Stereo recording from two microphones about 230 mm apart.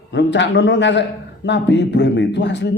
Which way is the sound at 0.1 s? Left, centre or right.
Left.